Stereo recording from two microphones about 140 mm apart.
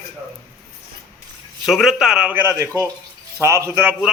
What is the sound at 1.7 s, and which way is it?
A man's voice, centre (ahead or behind).